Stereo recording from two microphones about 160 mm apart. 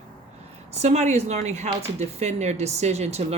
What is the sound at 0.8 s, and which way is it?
Speech, 45° right (ahead or behind).